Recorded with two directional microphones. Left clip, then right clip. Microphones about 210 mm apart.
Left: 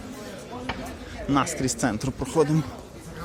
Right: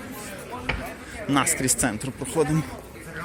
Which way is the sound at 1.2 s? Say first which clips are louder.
Right 1 dB; 10° left (ahead or behind).